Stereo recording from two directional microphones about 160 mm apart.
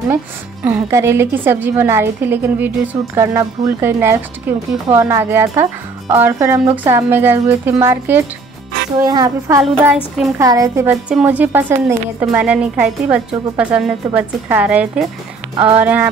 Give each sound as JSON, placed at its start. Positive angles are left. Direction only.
{"t": 0.7, "sound": "a woman's voice", "side_deg": -15}
{"t": 11.1, "sound": "a woman's voice", "side_deg": -10}
{"t": 15.5, "sound": "speech", "side_deg": -35}
{"t": 15.8, "sound": "a woman's voice", "side_deg": -10}